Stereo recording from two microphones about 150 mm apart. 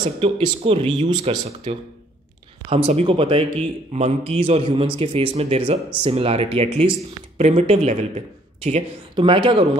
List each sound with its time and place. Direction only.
0.2 s a man's voice: 40° right (ahead or behind)
9.1 s a man's voice: 35° right (ahead or behind)